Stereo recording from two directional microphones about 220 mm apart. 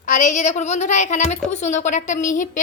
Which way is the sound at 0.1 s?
35° left (ahead or behind).